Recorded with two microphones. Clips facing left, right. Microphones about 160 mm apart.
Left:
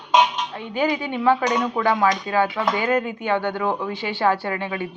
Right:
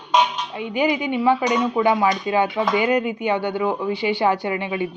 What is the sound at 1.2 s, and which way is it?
Speech, 10° right (ahead or behind).